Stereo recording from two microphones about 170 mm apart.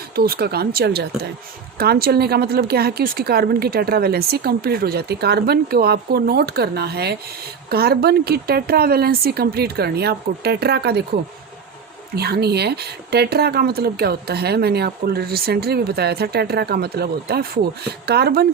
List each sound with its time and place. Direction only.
0.2 s speech: 65° right (ahead or behind)
12.1 s speech: 70° right (ahead or behind)